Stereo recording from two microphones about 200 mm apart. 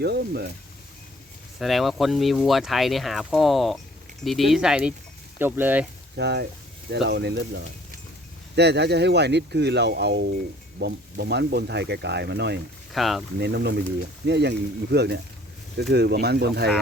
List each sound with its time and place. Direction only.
0.0 s speech: 55° right (ahead or behind)
1.5 s speech: centre (ahead or behind)
6.1 s speech: 55° right (ahead or behind)
12.9 s speech: centre (ahead or behind)
13.4 s speech: 55° right (ahead or behind)